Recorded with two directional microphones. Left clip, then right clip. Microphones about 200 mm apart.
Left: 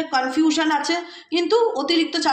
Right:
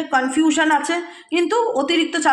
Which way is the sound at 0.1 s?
25° right (ahead or behind).